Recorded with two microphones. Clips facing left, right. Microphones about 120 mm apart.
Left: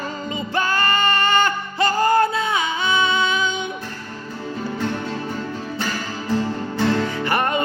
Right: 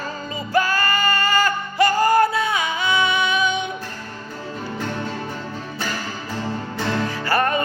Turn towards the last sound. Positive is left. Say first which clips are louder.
# right 1 dB
turn(degrees=20)  # may be behind; listen again after turning